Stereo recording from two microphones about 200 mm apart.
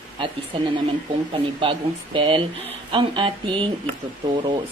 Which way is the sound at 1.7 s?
25° right (ahead or behind).